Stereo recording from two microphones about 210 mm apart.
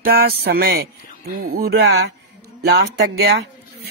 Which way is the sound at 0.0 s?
45° right (ahead or behind).